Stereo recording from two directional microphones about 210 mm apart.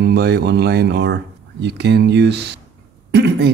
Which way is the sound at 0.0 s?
50° right (ahead or behind).